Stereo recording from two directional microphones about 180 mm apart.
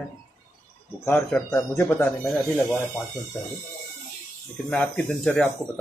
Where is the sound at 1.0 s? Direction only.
10° left (ahead or behind).